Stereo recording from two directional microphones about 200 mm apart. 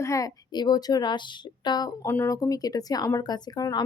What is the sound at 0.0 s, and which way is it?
A woman's voice, 15° left (ahead or behind).